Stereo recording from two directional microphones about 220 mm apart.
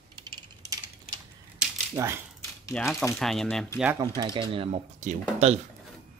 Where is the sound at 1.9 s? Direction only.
10° right (ahead or behind).